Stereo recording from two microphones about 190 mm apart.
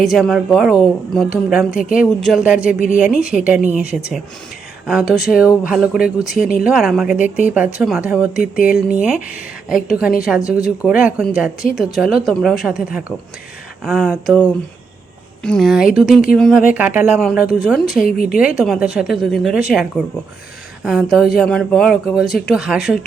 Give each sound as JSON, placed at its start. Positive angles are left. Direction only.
{"t": 0.0, "sound": "a woman's voice", "side_deg": 0}
{"t": 15.4, "sound": "a woman's voice", "side_deg": 0}
{"t": 18.0, "sound": "speech", "side_deg": 50}
{"t": 18.3, "sound": "a woman's voice", "side_deg": -5}